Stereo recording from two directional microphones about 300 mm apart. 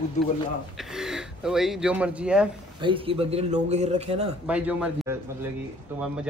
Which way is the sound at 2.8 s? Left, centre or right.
Centre.